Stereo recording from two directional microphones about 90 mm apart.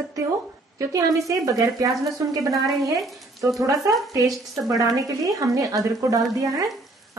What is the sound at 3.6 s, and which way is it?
Speech, 40° right (ahead or behind).